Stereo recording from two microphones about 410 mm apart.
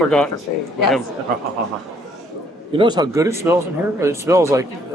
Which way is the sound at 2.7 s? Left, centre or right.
Centre.